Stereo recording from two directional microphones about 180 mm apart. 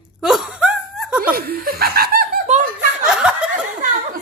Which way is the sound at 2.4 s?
40° right (ahead or behind).